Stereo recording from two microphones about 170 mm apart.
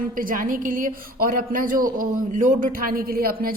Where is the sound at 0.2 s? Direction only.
55° right (ahead or behind).